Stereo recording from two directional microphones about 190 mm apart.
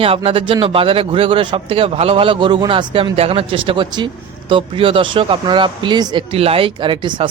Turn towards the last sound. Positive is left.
turn(degrees=-25)  # may be behind; listen again after turning